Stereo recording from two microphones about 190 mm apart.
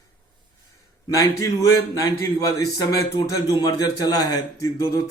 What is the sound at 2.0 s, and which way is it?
A man's voice, 20° left (ahead or behind).